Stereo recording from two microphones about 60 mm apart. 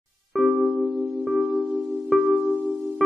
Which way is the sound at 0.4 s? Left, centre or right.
Centre.